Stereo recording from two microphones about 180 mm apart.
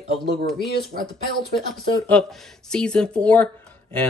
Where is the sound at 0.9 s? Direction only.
55° right (ahead or behind).